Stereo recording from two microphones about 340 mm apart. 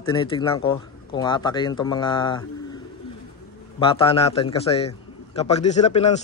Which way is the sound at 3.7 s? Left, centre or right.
Centre.